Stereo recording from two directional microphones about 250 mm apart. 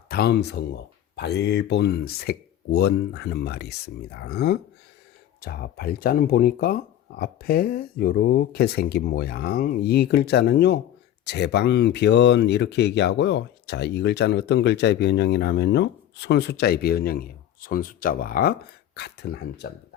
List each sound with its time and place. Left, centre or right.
0.1 s speech: left